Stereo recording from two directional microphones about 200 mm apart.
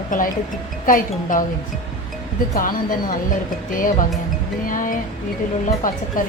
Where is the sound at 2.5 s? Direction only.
45° left (ahead or behind).